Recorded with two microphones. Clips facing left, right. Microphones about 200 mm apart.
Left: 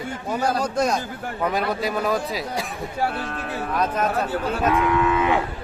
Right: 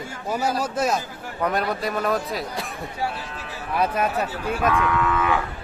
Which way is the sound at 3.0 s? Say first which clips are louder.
Left 4 dB; 55° left (ahead or behind).